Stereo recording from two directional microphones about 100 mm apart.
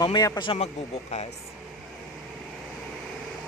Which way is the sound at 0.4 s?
65° left (ahead or behind).